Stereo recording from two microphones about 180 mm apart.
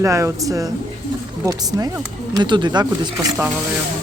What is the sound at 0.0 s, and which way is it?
Speech, 15° right (ahead or behind).